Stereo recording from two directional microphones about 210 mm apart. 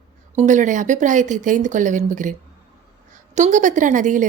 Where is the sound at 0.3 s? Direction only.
35° right (ahead or behind).